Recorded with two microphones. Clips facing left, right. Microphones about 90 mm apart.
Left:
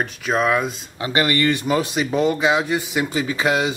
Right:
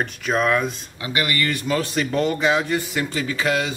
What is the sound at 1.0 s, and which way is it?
Speech, 30° left (ahead or behind).